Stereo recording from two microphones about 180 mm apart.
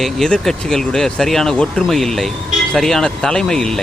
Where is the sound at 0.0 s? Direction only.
Centre (ahead or behind).